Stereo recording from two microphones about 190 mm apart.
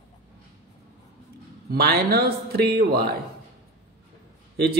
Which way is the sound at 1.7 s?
55° right (ahead or behind).